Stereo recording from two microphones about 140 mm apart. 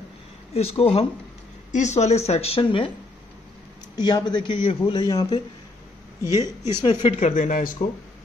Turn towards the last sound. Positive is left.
turn(degrees=65)  # may be behind; listen again after turning